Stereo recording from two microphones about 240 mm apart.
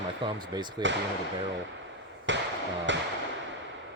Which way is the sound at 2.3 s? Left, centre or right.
Right.